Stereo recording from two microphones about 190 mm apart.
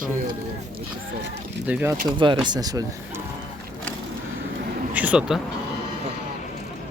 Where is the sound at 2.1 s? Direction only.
25° right (ahead or behind).